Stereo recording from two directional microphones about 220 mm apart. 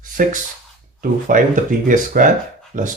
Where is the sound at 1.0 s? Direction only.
40° right (ahead or behind).